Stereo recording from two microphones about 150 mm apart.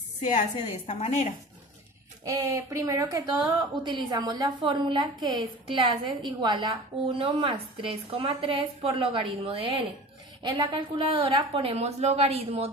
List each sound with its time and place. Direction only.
0.9 s speech: 45° left (ahead or behind)
2.2 s a woman's voice: 20° right (ahead or behind); by 12.7 s 45° right (ahead or behind)